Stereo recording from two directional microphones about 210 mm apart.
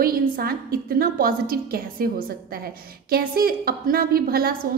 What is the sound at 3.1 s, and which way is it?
A woman's voice, 45° right (ahead or behind).